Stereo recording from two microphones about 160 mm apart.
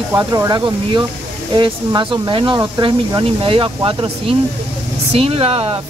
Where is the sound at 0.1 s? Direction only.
20° right (ahead or behind).